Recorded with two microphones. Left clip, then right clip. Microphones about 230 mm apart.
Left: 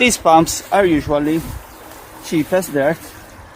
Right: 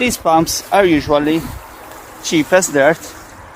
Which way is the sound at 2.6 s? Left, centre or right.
Right.